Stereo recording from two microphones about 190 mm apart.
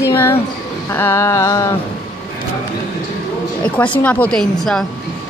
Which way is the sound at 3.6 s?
5° left (ahead or behind).